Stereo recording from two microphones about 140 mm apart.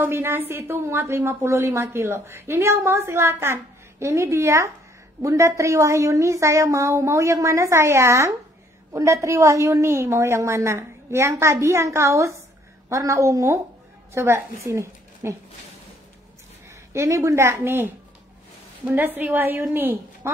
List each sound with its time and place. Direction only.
0.0 s a woman's voice: 15° right (ahead or behind)
16.6 s a woman's voice: 20° right (ahead or behind)